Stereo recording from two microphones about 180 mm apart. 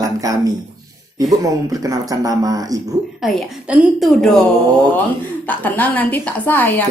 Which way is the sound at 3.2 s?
Centre (ahead or behind).